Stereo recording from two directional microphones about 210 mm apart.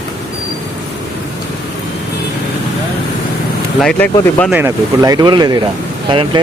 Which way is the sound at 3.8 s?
5° left (ahead or behind).